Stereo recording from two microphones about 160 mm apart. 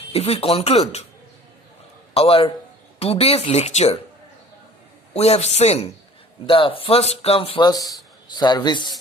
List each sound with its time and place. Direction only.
0.1 s speech: 40° left (ahead or behind)
2.1 s speech: 35° left (ahead or behind)
5.1 s a man's voice: 40° left (ahead or behind)